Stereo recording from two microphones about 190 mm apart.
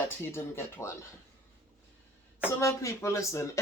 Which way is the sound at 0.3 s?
15° left (ahead or behind).